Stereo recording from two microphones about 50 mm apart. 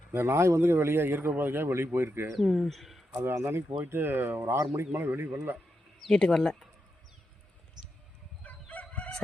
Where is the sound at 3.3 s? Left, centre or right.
Right.